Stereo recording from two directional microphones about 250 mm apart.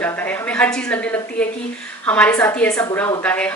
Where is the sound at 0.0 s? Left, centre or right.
Centre.